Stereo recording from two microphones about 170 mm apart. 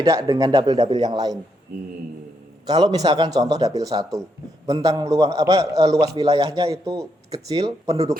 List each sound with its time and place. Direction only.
0.0 s a man's voice: 20° right (ahead or behind)
2.6 s a man's voice: 25° right (ahead or behind)